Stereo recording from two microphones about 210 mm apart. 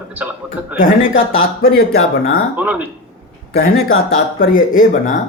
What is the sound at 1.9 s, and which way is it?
Speech, 75° left (ahead or behind).